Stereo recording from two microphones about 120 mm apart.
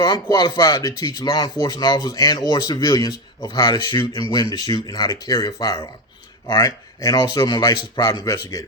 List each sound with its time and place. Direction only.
0.0 s speech: 35° left (ahead or behind)